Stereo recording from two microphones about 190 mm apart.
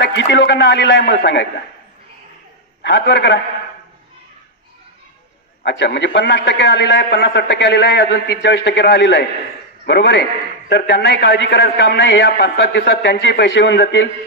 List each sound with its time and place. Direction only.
0.0 s a man's voice: 65° left (ahead or behind)
2.8 s a man's voice: 65° left (ahead or behind)
5.6 s a man's voice: 65° left (ahead or behind)